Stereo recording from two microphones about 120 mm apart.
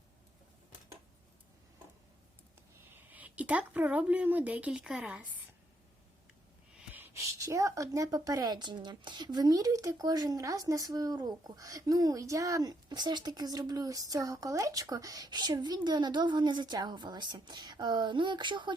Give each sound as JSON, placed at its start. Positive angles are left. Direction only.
{"t": 2.9, "sound": "speech", "side_deg": -15}
{"t": 6.7, "sound": "a woman's voice", "side_deg": -15}